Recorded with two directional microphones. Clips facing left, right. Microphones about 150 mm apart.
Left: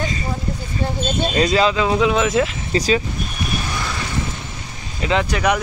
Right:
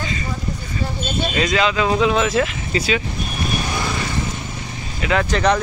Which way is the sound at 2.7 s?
35° left (ahead or behind).